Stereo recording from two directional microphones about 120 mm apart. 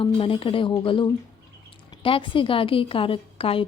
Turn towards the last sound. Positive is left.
turn(degrees=50)  # may be behind; listen again after turning